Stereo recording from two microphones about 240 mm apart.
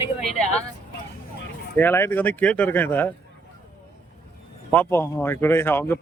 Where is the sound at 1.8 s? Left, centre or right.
Centre.